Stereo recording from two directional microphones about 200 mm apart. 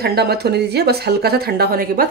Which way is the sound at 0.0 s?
55° right (ahead or behind).